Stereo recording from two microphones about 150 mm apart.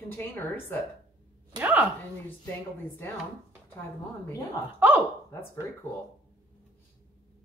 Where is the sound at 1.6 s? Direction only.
10° right (ahead or behind).